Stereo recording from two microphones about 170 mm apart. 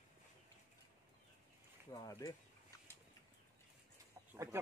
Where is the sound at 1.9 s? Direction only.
20° left (ahead or behind).